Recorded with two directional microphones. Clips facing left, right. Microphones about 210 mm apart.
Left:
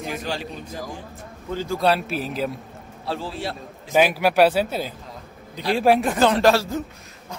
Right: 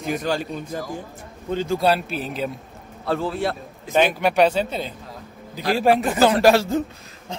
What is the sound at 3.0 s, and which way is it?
Speech, 55° right (ahead or behind).